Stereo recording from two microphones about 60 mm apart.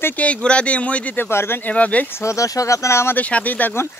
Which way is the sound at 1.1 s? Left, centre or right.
Left.